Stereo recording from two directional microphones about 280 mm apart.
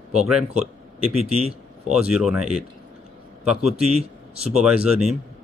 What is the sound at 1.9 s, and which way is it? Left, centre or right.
Speech, centre.